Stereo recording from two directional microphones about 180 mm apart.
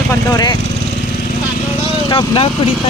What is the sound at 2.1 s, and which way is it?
Speech, 25° left (ahead or behind).